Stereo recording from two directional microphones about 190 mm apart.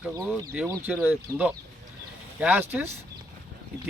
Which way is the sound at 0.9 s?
5° right (ahead or behind).